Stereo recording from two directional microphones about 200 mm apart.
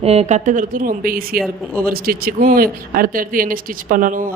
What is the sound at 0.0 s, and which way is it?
Speech, 30° right (ahead or behind).